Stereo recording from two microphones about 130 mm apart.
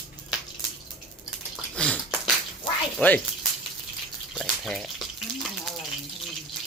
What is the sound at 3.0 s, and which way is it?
Speech, 10° left (ahead or behind).